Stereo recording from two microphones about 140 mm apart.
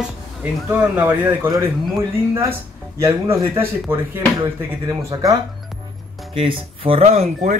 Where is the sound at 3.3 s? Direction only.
20° right (ahead or behind).